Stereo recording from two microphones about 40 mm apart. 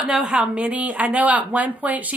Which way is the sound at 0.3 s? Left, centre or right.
Right.